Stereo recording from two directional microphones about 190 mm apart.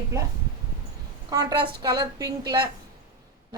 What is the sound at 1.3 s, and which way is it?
A woman's voice, 20° right (ahead or behind).